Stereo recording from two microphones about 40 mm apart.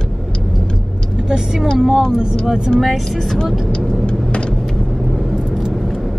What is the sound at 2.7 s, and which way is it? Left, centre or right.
Speech, centre.